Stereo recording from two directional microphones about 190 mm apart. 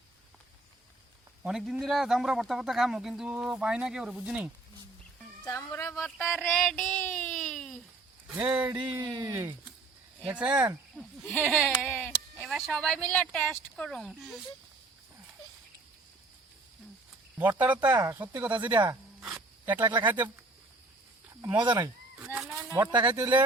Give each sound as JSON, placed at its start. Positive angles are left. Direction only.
{"t": 1.5, "sound": "speech", "side_deg": -5}
{"t": 5.5, "sound": "speech", "side_deg": 15}
{"t": 6.0, "sound": "a sound", "side_deg": 0}
{"t": 8.4, "sound": "speech", "side_deg": -5}
{"t": 10.9, "sound": "speech", "side_deg": 5}
{"t": 17.7, "sound": "speech", "side_deg": -20}
{"t": 18.1, "sound": "speech", "side_deg": -10}
{"t": 18.7, "sound": "speech", "side_deg": -25}
{"t": 19.2, "sound": "a sound", "side_deg": -5}
{"t": 20.1, "sound": "speech", "side_deg": -10}
{"t": 21.6, "sound": "speech", "side_deg": -25}